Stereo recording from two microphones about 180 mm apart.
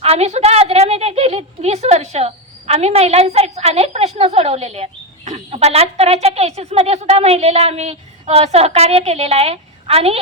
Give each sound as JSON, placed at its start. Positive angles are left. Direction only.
{"t": 0.0, "sound": "a woman's voice", "side_deg": -35}